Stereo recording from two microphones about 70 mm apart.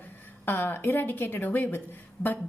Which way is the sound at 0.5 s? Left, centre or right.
Left.